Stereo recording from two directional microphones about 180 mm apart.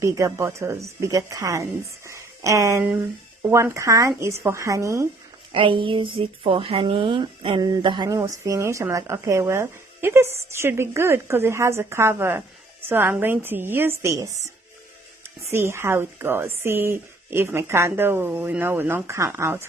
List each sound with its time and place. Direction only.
0.0 s speech: 20° right (ahead or behind)
2.0 s a sound: 15° right (ahead or behind)
3.4 s speech: 15° right (ahead or behind)
5.5 s speech: 30° right (ahead or behind)